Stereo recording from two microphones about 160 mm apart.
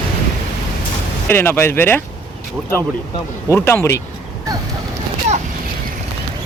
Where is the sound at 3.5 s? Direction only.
15° left (ahead or behind).